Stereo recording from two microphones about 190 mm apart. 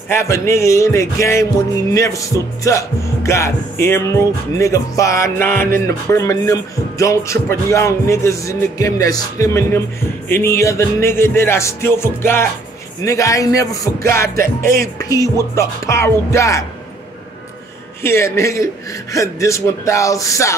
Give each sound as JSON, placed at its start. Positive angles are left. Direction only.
{"t": 0.1, "sound": "music", "side_deg": 15}
{"t": 18.0, "sound": "music", "side_deg": 15}